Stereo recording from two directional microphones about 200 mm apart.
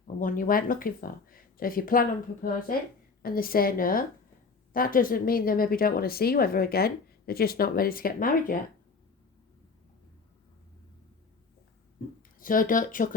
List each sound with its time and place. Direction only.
0.2 s speech: 45° left (ahead or behind)
12.4 s speech: 45° left (ahead or behind)